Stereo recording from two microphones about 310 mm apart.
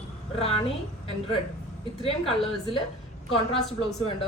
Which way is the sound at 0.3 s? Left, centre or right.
Centre.